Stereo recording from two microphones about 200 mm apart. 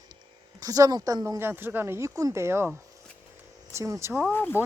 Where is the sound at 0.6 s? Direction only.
15° right (ahead or behind).